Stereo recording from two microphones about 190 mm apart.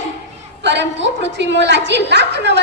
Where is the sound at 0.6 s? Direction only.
65° right (ahead or behind).